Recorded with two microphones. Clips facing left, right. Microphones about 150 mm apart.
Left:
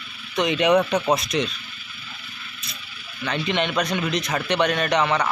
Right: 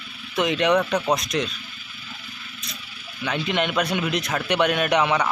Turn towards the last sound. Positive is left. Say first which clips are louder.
# right 1 dB
turn(degrees=-10)  # may be behind; listen again after turning